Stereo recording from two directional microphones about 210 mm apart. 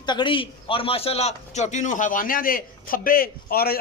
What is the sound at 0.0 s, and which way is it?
A man's voice, 20° left (ahead or behind).